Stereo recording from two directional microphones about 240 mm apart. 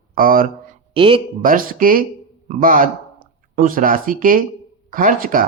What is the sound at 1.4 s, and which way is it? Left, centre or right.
Speech, right.